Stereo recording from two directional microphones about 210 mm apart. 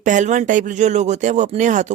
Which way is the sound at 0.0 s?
35° right (ahead or behind).